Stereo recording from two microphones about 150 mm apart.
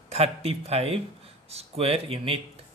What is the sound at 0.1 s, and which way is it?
Speech, 40° right (ahead or behind).